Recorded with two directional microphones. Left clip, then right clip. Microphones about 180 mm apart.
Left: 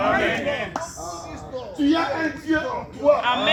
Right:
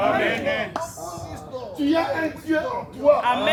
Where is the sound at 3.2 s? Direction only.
55° right (ahead or behind).